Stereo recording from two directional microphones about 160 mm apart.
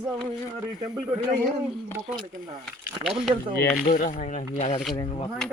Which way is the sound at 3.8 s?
55° left (ahead or behind).